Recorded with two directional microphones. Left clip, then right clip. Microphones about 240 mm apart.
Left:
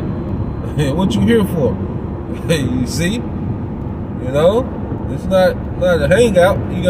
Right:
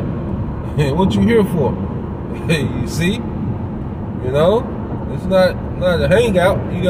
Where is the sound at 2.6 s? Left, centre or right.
Centre.